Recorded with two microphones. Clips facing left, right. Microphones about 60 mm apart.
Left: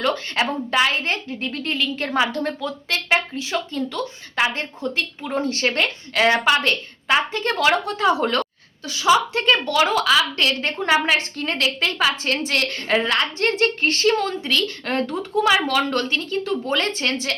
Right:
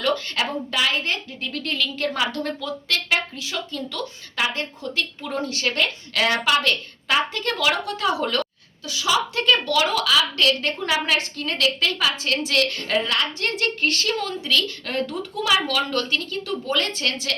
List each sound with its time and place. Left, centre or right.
0.0 s a woman's voice: left